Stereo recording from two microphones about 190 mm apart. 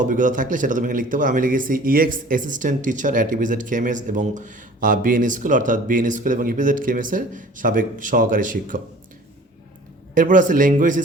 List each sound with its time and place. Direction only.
0.0 s speech: 40° right (ahead or behind)
10.2 s speech: 45° right (ahead or behind)